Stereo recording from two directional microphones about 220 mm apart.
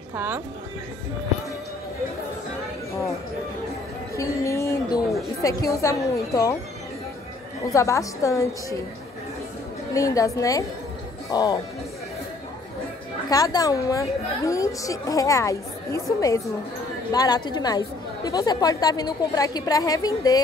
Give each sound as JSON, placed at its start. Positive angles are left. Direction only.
{"t": 0.1, "sound": "speech", "side_deg": -10}
{"t": 4.1, "sound": "a sound", "side_deg": 15}
{"t": 5.4, "sound": "a woman's voice", "side_deg": 15}
{"t": 7.7, "sound": "a woman's voice", "side_deg": 15}
{"t": 9.9, "sound": "a woman's voice", "side_deg": 15}
{"t": 13.3, "sound": "a woman's voice", "side_deg": 15}